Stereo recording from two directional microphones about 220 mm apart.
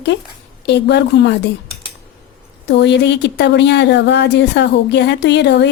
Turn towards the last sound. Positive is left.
turn(degrees=50)  # may be behind; listen again after turning